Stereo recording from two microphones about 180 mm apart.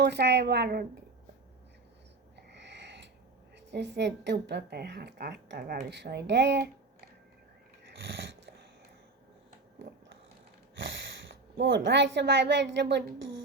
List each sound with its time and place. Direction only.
0.0 s a woman's voice: 65° right (ahead or behind)
2.5 s a sound: 75° right (ahead or behind)
3.7 s a woman's voice: 70° right (ahead or behind)
7.9 s dog: 80° right
11.3 s a woman's voice: 80° right